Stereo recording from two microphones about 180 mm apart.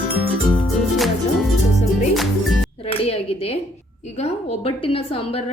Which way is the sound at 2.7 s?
30° left (ahead or behind).